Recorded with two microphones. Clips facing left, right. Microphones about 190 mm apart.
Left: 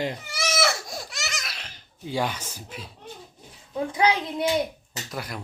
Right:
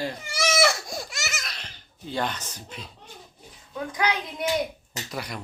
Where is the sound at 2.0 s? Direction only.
10° left (ahead or behind).